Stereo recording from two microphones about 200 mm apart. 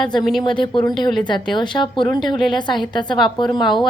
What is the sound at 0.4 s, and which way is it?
A woman's voice, 25° left (ahead or behind).